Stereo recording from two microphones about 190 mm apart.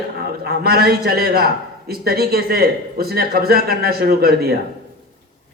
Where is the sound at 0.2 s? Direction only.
55° right (ahead or behind).